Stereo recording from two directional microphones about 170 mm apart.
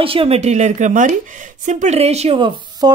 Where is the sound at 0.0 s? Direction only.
30° right (ahead or behind).